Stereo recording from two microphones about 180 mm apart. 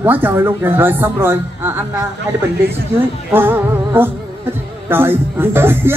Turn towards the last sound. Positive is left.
turn(degrees=-10)  # may be behind; listen again after turning